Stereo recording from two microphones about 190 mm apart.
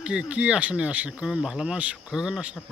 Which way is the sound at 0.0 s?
5° right (ahead or behind).